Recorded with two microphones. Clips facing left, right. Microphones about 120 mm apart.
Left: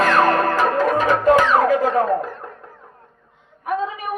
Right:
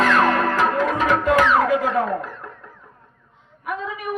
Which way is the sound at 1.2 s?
35° left (ahead or behind).